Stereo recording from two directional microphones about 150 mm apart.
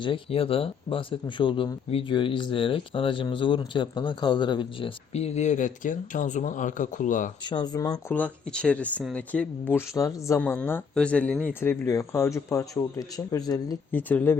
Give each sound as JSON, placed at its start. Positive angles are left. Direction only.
{"t": 0.0, "sound": "speech", "side_deg": 35}
{"t": 7.4, "sound": "speech", "side_deg": 30}
{"t": 8.1, "sound": "speech", "side_deg": 10}
{"t": 13.9, "sound": "speech", "side_deg": 10}